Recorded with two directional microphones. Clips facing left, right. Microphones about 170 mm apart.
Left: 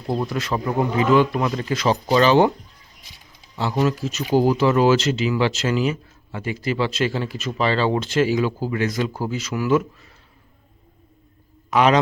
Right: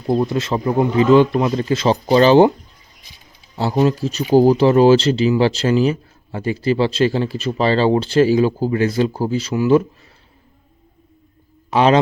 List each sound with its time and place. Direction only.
0.1 s speech: 25° right (ahead or behind)
3.5 s speech: 35° right (ahead or behind)
11.7 s a man's voice: 30° right (ahead or behind)